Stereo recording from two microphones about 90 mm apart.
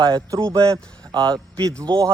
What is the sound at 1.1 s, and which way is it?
Speech, 50° right (ahead or behind).